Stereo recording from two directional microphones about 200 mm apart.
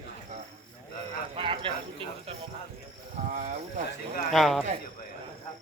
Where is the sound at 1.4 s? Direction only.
25° right (ahead or behind).